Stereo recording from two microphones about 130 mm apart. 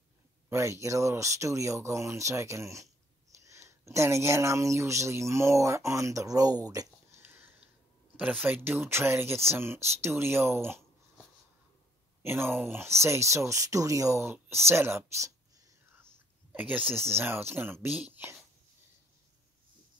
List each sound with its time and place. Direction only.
0.5 s speech: 20° right (ahead or behind)
12.2 s speech: 20° right (ahead or behind)
16.5 s speech: 10° right (ahead or behind)